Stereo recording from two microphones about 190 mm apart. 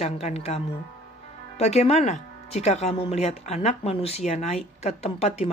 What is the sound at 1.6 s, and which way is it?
Speech, 35° left (ahead or behind).